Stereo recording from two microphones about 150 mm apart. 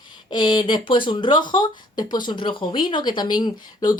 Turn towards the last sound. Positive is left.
turn(degrees=30)  # may be behind; listen again after turning